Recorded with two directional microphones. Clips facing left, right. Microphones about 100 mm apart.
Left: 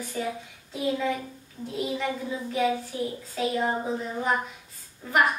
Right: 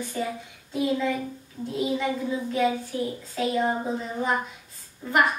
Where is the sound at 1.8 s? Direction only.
Centre (ahead or behind).